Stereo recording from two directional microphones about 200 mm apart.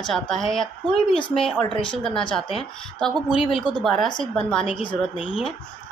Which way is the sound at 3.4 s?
25° left (ahead or behind).